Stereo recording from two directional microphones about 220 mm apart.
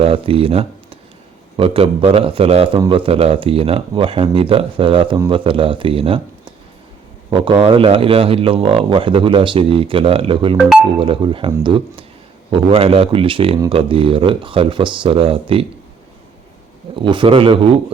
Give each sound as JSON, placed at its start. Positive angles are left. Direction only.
{"t": 0.0, "sound": "speech", "side_deg": -25}
{"t": 16.9, "sound": "speech", "side_deg": -20}